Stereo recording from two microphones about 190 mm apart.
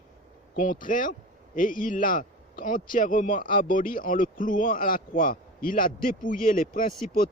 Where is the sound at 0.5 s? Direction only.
45° left (ahead or behind).